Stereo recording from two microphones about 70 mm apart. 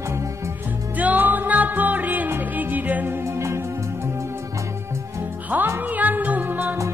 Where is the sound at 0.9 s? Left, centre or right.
Right.